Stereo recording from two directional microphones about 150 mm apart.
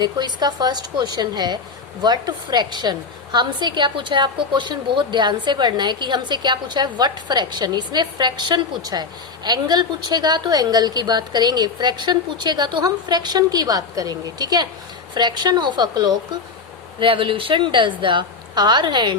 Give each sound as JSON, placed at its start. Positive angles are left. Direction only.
{"t": 0.0, "sound": "a woman's voice", "side_deg": -30}